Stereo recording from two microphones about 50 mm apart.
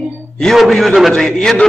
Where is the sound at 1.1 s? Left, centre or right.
Centre.